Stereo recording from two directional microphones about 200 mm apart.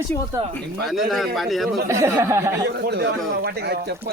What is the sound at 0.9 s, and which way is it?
Speech, centre (ahead or behind).